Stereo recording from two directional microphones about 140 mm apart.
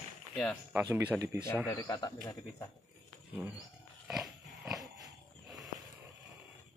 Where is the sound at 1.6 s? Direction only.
25° left (ahead or behind).